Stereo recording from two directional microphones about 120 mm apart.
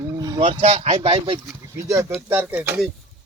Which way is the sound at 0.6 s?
60° right (ahead or behind).